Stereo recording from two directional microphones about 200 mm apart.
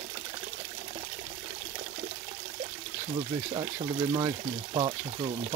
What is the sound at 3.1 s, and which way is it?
Speech, 20° right (ahead or behind).